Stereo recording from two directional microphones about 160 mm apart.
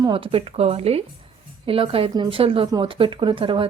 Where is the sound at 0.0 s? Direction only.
35° right (ahead or behind).